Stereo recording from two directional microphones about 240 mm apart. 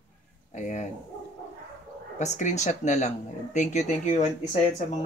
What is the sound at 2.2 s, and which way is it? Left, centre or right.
Speech, left.